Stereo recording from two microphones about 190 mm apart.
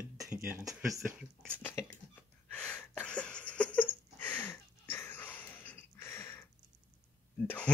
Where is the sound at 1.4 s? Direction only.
10° left (ahead or behind).